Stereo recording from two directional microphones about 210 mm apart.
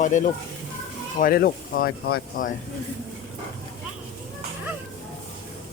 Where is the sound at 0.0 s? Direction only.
35° left (ahead or behind).